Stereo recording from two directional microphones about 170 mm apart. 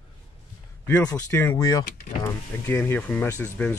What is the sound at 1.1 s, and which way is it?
Speech, 20° left (ahead or behind).